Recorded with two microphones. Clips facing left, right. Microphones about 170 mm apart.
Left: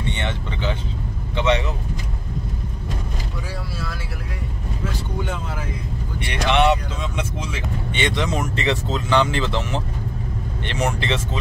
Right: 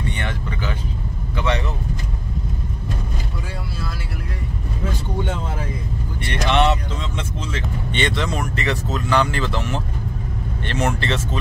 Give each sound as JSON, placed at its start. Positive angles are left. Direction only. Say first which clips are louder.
{"t": 0.1, "sound": "vehicle", "louder": "even", "side_deg": 25}
{"t": 6.2, "sound": "speech", "louder": "left 1 dB", "side_deg": 10}